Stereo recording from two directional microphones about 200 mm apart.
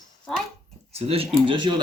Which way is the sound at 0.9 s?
30° right (ahead or behind).